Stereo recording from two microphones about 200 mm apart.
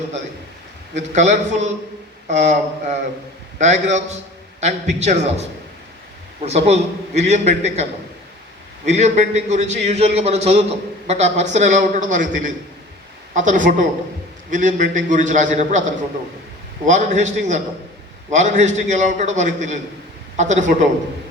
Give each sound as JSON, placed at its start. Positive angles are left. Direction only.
{"t": 0.9, "sound": "a man's voice", "side_deg": -35}
{"t": 6.4, "sound": "a man's voice", "side_deg": -30}
{"t": 8.9, "sound": "a man's voice", "side_deg": -35}
{"t": 16.8, "sound": "a man's voice", "side_deg": -35}